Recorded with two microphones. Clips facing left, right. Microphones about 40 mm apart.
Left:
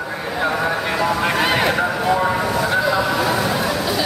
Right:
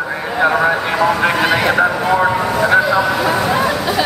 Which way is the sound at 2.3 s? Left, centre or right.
Centre.